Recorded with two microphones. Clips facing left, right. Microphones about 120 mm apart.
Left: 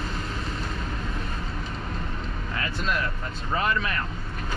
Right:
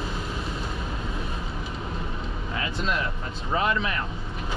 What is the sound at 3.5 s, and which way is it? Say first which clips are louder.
Speech: right 1 dB; 15° right (ahead or behind).